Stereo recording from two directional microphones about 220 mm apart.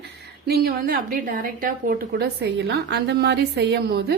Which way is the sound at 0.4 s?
45° right (ahead or behind).